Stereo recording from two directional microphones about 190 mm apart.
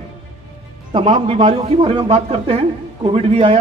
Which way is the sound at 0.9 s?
30° right (ahead or behind).